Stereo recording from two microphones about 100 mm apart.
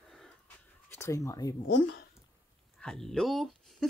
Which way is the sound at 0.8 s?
25° left (ahead or behind).